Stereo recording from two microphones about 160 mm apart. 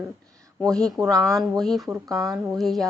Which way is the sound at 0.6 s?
5° left (ahead or behind).